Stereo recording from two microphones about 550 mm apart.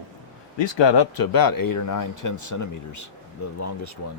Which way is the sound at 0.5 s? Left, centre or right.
Left.